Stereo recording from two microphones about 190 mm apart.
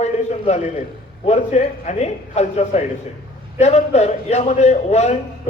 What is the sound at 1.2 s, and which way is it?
A man's voice, 35° left (ahead or behind).